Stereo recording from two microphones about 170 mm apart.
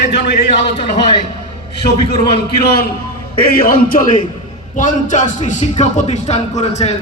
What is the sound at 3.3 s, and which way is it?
A man's voice, 60° left (ahead or behind).